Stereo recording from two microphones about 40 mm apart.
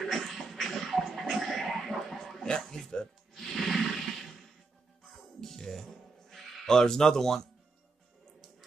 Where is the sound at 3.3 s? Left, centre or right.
Centre.